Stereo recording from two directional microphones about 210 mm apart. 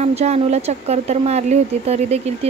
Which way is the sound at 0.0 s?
30° right (ahead or behind).